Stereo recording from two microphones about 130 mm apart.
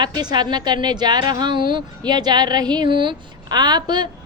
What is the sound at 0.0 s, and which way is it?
A woman's voice, 35° right (ahead or behind).